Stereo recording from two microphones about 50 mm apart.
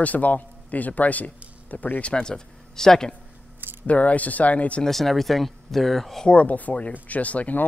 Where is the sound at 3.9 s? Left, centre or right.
Left.